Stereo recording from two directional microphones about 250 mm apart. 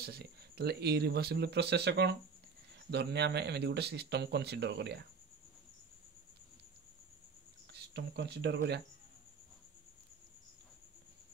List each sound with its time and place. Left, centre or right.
0.0 s speech: right
7.7 s speech: right